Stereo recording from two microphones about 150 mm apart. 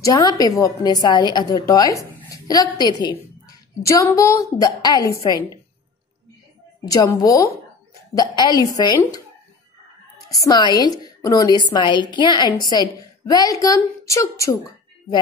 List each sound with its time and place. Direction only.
0.0 s a woman's voice: 25° left (ahead or behind)
6.9 s a woman's voice: 25° left (ahead or behind)
10.3 s a woman's voice: 25° left (ahead or behind)